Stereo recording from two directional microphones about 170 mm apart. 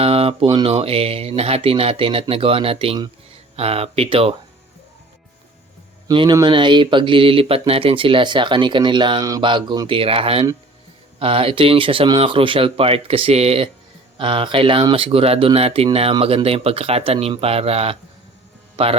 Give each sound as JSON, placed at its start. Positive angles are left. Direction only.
{"t": 0.0, "sound": "speech", "side_deg": -35}
{"t": 6.1, "sound": "speech", "side_deg": -25}